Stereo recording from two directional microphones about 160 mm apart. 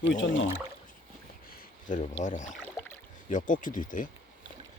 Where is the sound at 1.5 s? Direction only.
60° left (ahead or behind).